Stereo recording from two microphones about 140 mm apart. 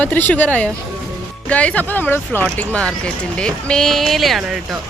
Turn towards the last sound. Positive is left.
turn(degrees=0)  # may be behind; listen again after turning